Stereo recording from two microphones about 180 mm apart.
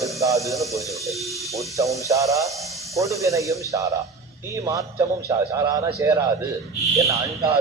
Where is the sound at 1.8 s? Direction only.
15° right (ahead or behind).